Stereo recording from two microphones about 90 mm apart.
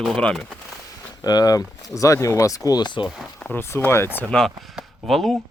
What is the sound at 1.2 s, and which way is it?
Speech, 45° left (ahead or behind).